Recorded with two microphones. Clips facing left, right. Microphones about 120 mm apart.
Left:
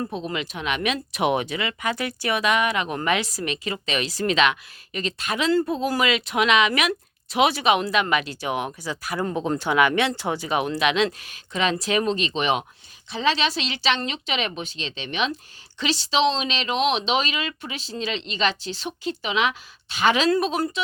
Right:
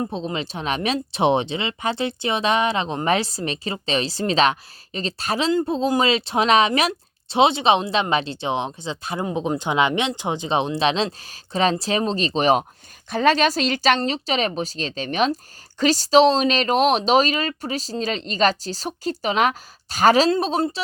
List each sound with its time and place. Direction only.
0.0 s speech: 25° right (ahead or behind)
5.5 s speech: 25° right (ahead or behind); by 20.3 s 40° right (ahead or behind)
20.3 s speech: 30° right (ahead or behind)